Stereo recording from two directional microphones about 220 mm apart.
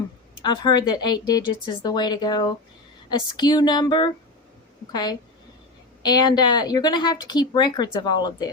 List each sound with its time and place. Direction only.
0.4 s a woman's voice: 20° left (ahead or behind)